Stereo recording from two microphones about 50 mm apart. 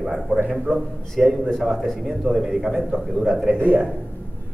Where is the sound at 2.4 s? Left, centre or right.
Centre.